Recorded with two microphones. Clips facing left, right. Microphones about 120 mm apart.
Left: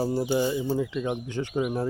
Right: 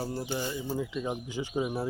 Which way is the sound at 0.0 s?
10° left (ahead or behind).